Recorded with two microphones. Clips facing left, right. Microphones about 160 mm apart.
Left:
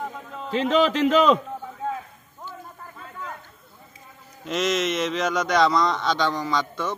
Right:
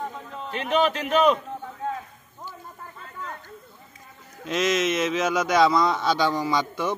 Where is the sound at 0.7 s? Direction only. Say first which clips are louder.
Left 3 dB; 90° left.